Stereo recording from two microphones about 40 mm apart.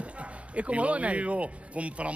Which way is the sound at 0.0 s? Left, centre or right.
Right.